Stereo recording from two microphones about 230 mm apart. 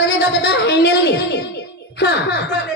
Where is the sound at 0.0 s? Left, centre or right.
Left.